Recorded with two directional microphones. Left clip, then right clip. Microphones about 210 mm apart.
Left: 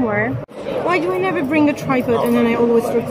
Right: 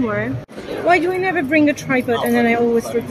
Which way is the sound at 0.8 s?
5° right (ahead or behind).